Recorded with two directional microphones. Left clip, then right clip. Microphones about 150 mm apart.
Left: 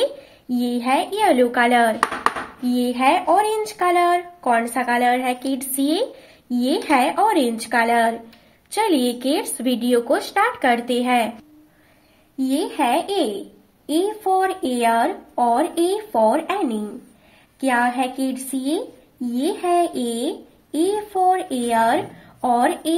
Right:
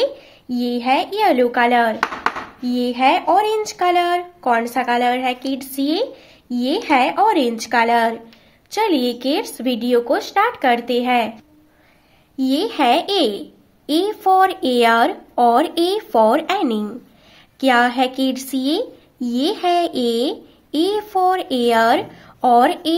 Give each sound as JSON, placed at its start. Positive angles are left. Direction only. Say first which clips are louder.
{"t": 0.0, "sound": "a woman's voice", "louder": "right 2 dB", "side_deg": -15}
{"t": 12.4, "sound": "speech", "louder": "right 3 dB", "side_deg": -40}